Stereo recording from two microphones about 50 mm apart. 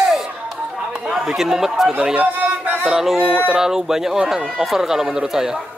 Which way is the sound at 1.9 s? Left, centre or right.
Right.